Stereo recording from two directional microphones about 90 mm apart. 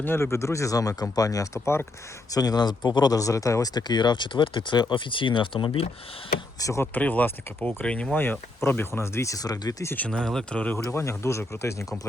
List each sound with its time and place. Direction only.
0.0 s speech: 25° left (ahead or behind)
1.6 s speech: 30° left (ahead or behind)
2.3 s speech: 45° left (ahead or behind); by 5.9 s 80° left
6.6 s speech: 35° left (ahead or behind)
6.9 s speech: 20° left (ahead or behind); by 9.8 s 45° left (ahead or behind)
9.8 s speech: 20° left (ahead or behind)
10.1 s speech: 10° left (ahead or behind)
10.8 s speech: 30° left (ahead or behind)